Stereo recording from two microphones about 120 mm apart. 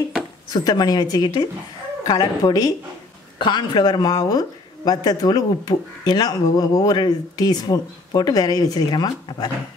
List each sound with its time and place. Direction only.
0.5 s speech: 35° left (ahead or behind)